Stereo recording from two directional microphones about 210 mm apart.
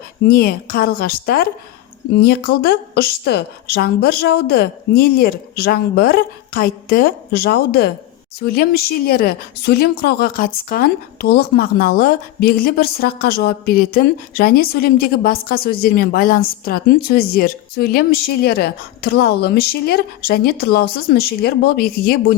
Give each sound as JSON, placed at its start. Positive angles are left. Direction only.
{"t": 0.3, "sound": "speech", "side_deg": 45}